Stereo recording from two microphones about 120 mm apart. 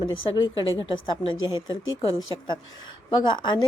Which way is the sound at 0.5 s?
45° left (ahead or behind).